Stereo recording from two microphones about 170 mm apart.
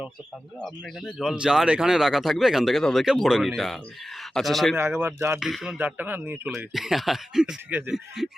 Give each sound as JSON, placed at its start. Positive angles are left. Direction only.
{"t": 0.6, "sound": "speech", "side_deg": 0}
{"t": 4.8, "sound": "speech", "side_deg": -15}
{"t": 5.4, "sound": "speech", "side_deg": 0}